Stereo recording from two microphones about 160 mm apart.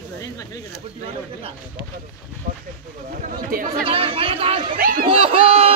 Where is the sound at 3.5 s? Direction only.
60° right (ahead or behind).